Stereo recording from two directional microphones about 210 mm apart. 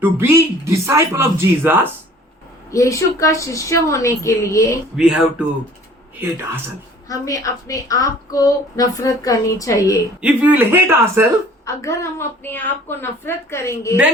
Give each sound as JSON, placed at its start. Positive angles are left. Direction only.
{"t": 0.0, "sound": "speech", "side_deg": -10}
{"t": 2.6, "sound": "a woman's voice", "side_deg": 15}
{"t": 4.9, "sound": "speech", "side_deg": -5}
{"t": 7.1, "sound": "a woman's voice", "side_deg": 15}
{"t": 10.2, "sound": "speech", "side_deg": -5}
{"t": 11.6, "sound": "a woman's voice", "side_deg": 15}